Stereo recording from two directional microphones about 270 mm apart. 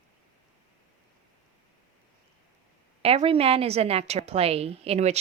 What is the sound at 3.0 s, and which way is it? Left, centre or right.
A woman's voice, right.